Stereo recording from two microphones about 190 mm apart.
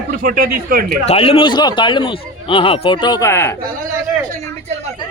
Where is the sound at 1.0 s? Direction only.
30° left (ahead or behind); by 3.5 s 15° left (ahead or behind).